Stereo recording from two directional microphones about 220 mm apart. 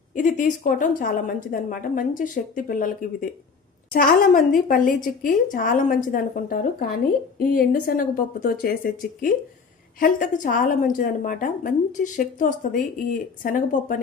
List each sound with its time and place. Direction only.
0.1 s a woman's voice: 35° left (ahead or behind)